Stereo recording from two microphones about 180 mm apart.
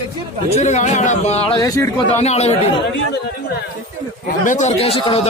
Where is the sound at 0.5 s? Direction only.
40° left (ahead or behind); by 1.9 s 20° left (ahead or behind).